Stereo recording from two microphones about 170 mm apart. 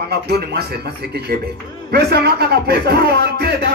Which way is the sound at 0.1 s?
70° right (ahead or behind).